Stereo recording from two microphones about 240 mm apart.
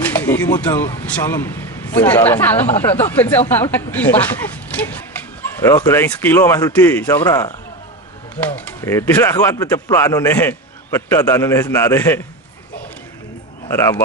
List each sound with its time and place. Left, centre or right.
0.0 s speech: centre
8.5 s speech: centre
13.7 s speech: centre